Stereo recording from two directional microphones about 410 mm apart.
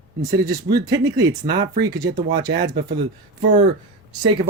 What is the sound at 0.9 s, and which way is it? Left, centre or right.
Speech, centre.